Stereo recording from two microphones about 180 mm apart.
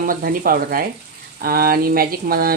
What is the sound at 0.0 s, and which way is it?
Speech, 50° right (ahead or behind).